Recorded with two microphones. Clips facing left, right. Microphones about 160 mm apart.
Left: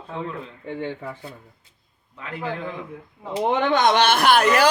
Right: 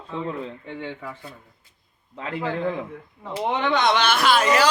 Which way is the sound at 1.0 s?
25° left (ahead or behind).